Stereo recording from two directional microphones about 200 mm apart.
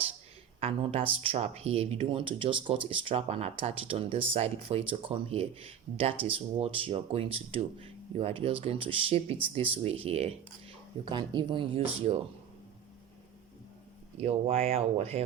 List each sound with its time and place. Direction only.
0.6 s speech: 30° right (ahead or behind)
14.2 s speech: 30° right (ahead or behind)